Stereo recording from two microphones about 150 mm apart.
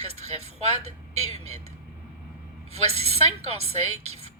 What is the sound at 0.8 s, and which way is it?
Speech, 45° right (ahead or behind).